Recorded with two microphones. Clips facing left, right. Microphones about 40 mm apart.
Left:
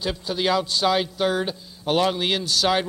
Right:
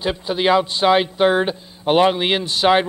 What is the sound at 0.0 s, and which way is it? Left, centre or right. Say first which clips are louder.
Speech: right 5 dB; right.